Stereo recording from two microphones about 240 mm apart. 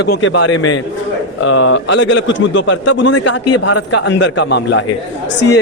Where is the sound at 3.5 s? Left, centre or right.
Left.